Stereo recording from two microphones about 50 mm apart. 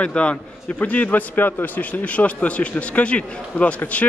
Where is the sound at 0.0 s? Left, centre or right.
Left.